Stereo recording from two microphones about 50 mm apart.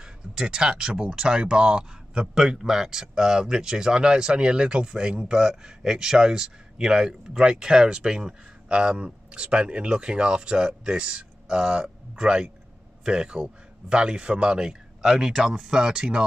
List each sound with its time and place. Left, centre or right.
0.0 s a man's voice: centre